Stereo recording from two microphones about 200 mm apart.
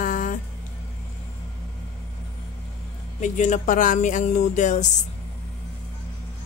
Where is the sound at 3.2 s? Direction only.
40° left (ahead or behind).